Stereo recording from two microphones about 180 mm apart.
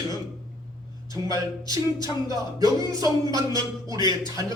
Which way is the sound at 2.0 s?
20° right (ahead or behind).